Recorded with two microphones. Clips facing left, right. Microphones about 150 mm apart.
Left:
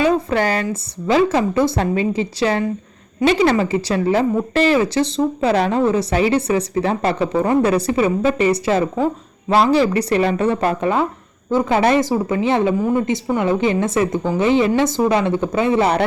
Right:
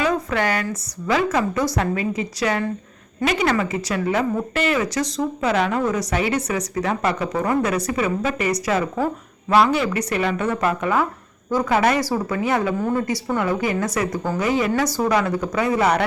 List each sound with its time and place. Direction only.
0.0 s a woman's voice: 30° left (ahead or behind)